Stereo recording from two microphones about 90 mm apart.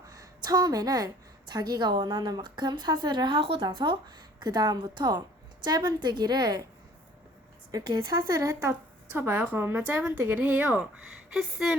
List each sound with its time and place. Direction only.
0.0 s a woman's voice: 40° right (ahead or behind); by 3.6 s 80° right
3.6 s a woman's voice: 55° right (ahead or behind)
7.7 s a woman's voice: 45° right (ahead or behind)
9.1 s a woman's voice: 25° right (ahead or behind)
11.3 s speech: 5° right (ahead or behind)